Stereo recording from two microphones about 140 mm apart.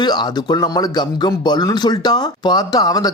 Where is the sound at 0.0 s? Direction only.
30° left (ahead or behind).